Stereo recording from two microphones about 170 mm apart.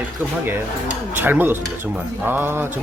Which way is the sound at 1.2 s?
10° right (ahead or behind).